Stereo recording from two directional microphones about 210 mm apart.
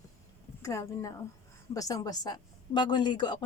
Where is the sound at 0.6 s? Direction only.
15° left (ahead or behind).